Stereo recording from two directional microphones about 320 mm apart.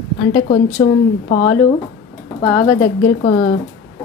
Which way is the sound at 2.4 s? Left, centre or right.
Left.